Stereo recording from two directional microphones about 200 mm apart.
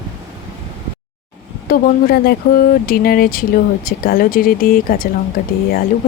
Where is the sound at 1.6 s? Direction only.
45° left (ahead or behind).